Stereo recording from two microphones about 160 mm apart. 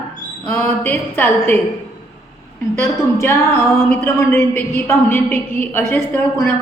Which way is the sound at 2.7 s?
15° left (ahead or behind).